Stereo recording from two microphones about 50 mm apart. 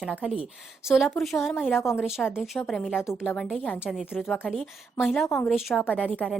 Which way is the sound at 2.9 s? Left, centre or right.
Centre.